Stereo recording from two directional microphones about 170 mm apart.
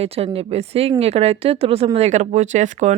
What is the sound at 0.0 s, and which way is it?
Speech, 35° right (ahead or behind).